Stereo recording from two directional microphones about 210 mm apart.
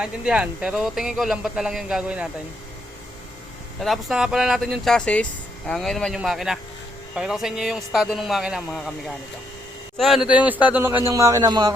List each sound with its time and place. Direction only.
0.0 s speech: 5° right (ahead or behind)
3.8 s a man's voice: centre (ahead or behind); by 11.7 s 20° right (ahead or behind)